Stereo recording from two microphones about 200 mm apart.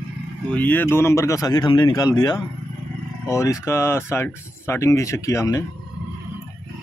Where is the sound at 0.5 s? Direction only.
10° left (ahead or behind).